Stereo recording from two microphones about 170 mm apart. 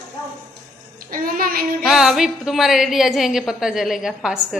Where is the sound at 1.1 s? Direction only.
55° right (ahead or behind).